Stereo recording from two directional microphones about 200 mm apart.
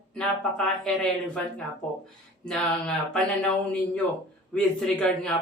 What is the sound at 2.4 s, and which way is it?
Speech, 5° left (ahead or behind).